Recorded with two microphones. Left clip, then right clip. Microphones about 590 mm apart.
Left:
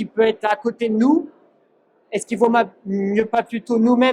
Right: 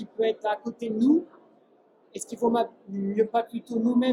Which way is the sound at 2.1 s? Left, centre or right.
Left.